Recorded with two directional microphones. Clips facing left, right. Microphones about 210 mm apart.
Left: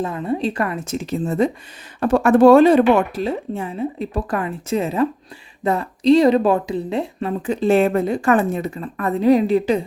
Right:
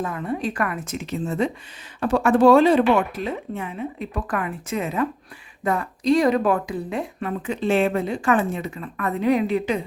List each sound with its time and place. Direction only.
0.0 s speech: 25° left (ahead or behind); by 3.2 s 45° left (ahead or behind)
3.2 s speech: 30° left (ahead or behind)